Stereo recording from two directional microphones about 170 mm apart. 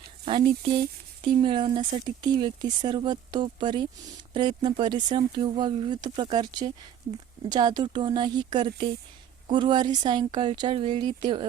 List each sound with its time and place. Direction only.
0.3 s speech: 30° right (ahead or behind)